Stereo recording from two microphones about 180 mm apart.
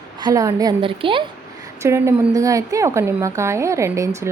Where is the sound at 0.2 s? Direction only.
20° right (ahead or behind).